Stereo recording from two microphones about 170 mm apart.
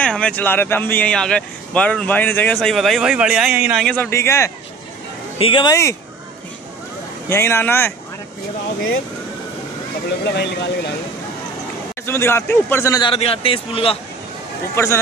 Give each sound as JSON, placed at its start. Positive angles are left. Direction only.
{"t": 0.0, "sound": "speech", "side_deg": 5}
{"t": 3.8, "sound": "speech", "side_deg": 10}
{"t": 5.4, "sound": "speech", "side_deg": 30}
{"t": 7.2, "sound": "speech", "side_deg": 15}
{"t": 10.2, "sound": "speech", "side_deg": 80}
{"t": 12.1, "sound": "speech", "side_deg": 15}
{"t": 13.1, "sound": "a man's voice", "side_deg": 35}
{"t": 14.8, "sound": "speech", "side_deg": 15}